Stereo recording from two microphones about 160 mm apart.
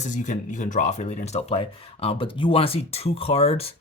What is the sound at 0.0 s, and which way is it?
Speech, 50° left (ahead or behind).